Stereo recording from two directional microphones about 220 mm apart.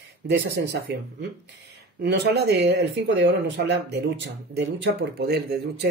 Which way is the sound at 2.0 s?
50° right (ahead or behind).